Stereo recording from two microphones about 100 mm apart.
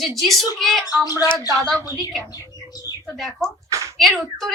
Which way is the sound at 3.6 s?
30° right (ahead or behind).